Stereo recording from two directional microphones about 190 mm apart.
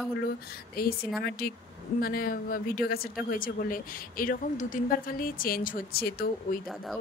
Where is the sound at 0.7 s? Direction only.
55° left (ahead or behind).